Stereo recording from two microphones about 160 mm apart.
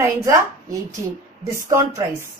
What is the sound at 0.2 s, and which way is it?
A woman's voice, 20° right (ahead or behind).